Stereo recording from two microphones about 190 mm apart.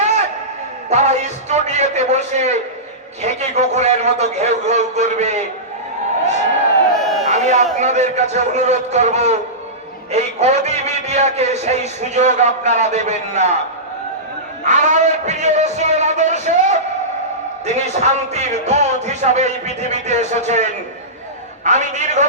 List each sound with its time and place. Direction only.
0.9 s a man's voice: 35° right (ahead or behind)
6.9 s a sound: centre (ahead or behind)
7.3 s a man's voice: 35° right (ahead or behind)
14.6 s a man's voice: 40° right (ahead or behind)